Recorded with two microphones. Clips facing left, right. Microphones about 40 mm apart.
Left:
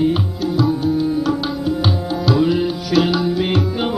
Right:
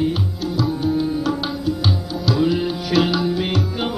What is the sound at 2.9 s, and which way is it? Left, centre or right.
Music, centre.